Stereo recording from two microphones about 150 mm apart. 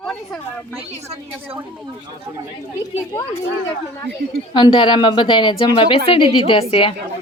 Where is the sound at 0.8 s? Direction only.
40° right (ahead or behind).